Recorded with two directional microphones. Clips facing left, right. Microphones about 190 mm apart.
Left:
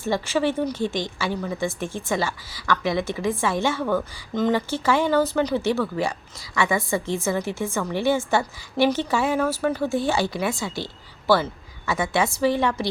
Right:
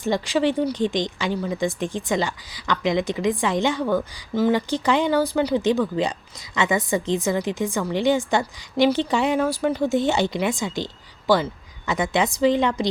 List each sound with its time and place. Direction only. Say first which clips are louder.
0.0 s a woman's voice: right 2 dB; 15° right (ahead or behind)